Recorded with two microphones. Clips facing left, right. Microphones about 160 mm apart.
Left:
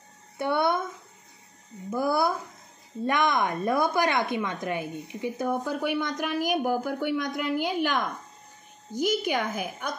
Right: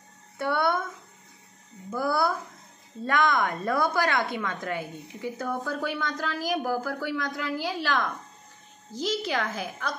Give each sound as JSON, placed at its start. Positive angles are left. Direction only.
{"t": 0.4, "sound": "speech", "side_deg": 20}
{"t": 1.9, "sound": "a woman's voice", "side_deg": 20}